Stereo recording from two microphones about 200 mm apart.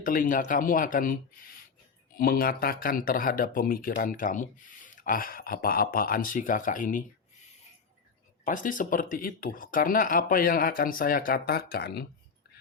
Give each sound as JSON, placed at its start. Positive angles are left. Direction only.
{"t": 0.0, "sound": "speech", "side_deg": 40}
{"t": 8.4, "sound": "speech", "side_deg": 40}